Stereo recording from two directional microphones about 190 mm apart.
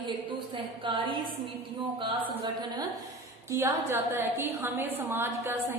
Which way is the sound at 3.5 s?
15° right (ahead or behind).